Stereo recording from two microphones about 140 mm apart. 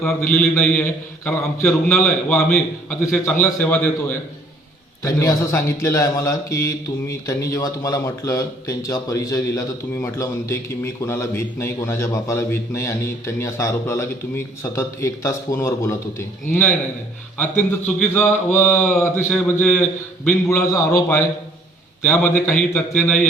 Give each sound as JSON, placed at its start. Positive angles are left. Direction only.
{"t": 0.2, "sound": "a man's voice", "side_deg": 15}
{"t": 5.0, "sound": "a man's voice", "side_deg": 25}
{"t": 20.7, "sound": "a man's voice", "side_deg": 25}